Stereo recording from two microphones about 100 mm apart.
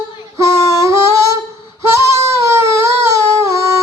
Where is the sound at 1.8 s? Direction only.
30° right (ahead or behind).